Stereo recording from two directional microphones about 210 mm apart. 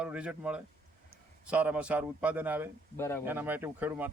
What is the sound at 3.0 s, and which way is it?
Speech, 10° left (ahead or behind).